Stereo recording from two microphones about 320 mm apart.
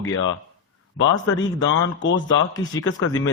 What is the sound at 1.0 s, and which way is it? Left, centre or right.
A man's voice, left.